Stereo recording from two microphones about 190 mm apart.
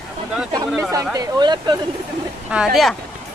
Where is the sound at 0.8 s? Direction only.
15° right (ahead or behind).